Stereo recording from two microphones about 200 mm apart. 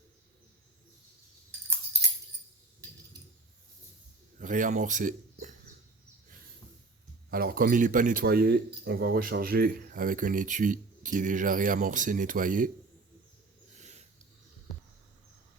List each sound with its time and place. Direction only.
4.4 s speech: 40° right (ahead or behind)
7.3 s speech: 50° right (ahead or behind)
13.7 s a sound: 35° right (ahead or behind)